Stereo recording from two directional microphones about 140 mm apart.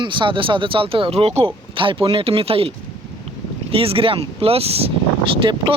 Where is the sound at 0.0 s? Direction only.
35° right (ahead or behind).